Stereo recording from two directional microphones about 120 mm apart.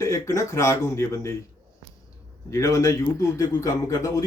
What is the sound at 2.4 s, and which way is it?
Speech, 25° left (ahead or behind).